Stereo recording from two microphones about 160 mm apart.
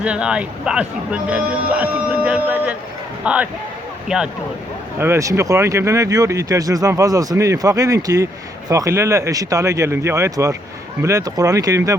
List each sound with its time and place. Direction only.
0.0 s speech: 5° right (ahead or behind)
4.9 s speech: 15° right (ahead or behind)